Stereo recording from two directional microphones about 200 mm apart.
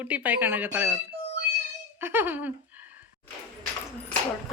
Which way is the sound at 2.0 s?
10° right (ahead or behind).